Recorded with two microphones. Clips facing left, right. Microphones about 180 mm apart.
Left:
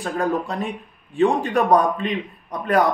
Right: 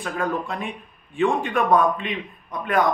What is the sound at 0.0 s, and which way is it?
Speech, 40° left (ahead or behind).